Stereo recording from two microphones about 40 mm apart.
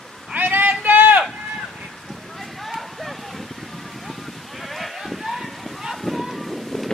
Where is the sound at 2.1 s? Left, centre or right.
Centre.